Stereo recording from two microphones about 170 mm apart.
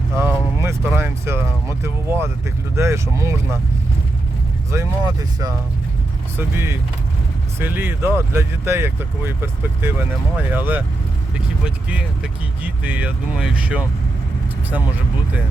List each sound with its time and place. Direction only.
0.2 s vehicle: 15° right (ahead or behind)
1.8 s speech: 15° right (ahead or behind)
4.7 s speech: 20° right (ahead or behind)